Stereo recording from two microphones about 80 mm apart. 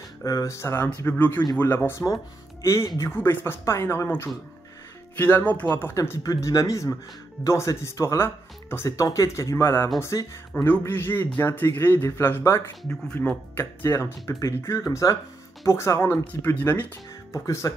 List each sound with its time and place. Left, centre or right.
0.2 s speech: left
0.8 s speech: left
5.1 s speech: left
10.5 s speech: left
12.8 s speech: centre
13.6 s speech: left
17.3 s speech: left